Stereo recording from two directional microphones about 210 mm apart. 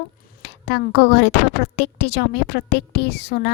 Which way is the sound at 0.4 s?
55° left (ahead or behind).